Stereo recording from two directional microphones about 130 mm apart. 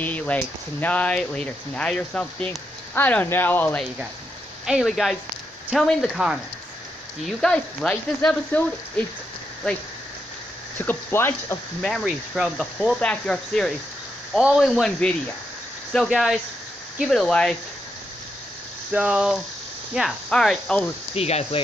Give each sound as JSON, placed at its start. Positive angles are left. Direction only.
{"t": 0.0, "sound": "speech", "side_deg": 10}
{"t": 4.6, "sound": "cricket", "side_deg": -5}
{"t": 7.4, "sound": "speech", "side_deg": 5}
{"t": 10.9, "sound": "speech", "side_deg": 15}
{"t": 11.8, "sound": "cricket", "side_deg": 0}
{"t": 18.9, "sound": "a sound", "side_deg": -10}
{"t": 19.9, "sound": "cricket", "side_deg": -5}
{"t": 21.1, "sound": "speech", "side_deg": 55}